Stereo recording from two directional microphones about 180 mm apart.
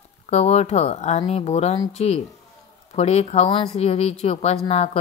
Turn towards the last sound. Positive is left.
turn(degrees=35)  # may be behind; listen again after turning